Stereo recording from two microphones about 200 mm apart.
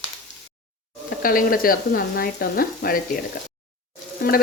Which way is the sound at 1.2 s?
45° left (ahead or behind).